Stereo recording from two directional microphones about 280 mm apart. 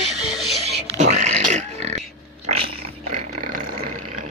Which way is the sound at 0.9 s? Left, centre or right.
Right.